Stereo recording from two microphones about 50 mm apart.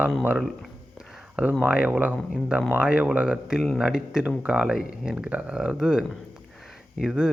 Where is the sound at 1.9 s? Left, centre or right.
Right.